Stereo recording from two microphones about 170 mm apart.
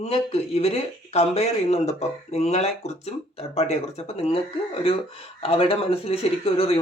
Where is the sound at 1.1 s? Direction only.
35° left (ahead or behind).